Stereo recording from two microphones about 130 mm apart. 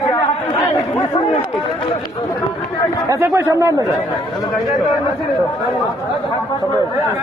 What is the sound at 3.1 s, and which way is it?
Speech, 25° right (ahead or behind).